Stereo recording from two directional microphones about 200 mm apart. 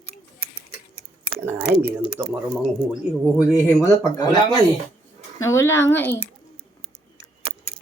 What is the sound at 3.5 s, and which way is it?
Speech, 10° left (ahead or behind).